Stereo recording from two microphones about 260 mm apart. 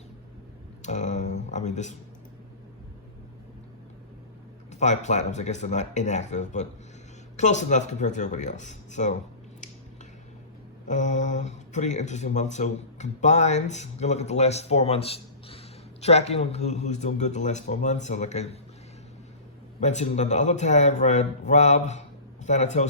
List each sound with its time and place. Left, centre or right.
0.8 s a sound: left
4.7 s speech: left
10.8 s speech: left
19.8 s speech: left